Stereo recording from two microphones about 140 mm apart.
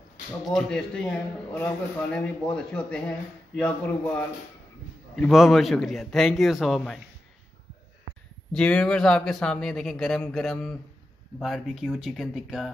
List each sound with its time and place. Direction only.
0.5 s a man's voice: 5° left (ahead or behind)
5.1 s a man's voice: centre (ahead or behind)
8.5 s a man's voice: 5° left (ahead or behind)